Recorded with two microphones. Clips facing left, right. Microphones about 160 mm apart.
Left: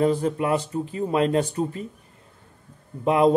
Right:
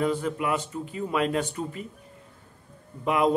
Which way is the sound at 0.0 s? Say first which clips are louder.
Left 5 dB; 35° left (ahead or behind).